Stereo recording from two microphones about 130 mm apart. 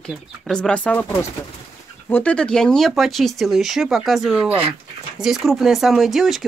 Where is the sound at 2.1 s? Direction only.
10° left (ahead or behind).